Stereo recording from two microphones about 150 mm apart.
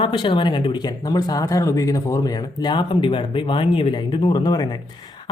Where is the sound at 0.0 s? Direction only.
35° left (ahead or behind).